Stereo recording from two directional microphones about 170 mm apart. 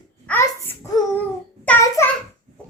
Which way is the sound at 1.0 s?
25° left (ahead or behind).